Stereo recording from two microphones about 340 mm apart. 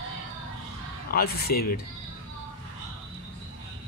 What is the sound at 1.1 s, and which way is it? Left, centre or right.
Speech, left.